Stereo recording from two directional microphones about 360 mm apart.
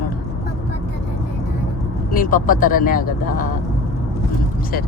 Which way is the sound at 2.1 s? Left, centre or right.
Left.